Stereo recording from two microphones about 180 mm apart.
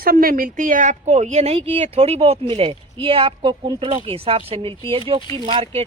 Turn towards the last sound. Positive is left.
turn(degrees=-30)  # may be behind; listen again after turning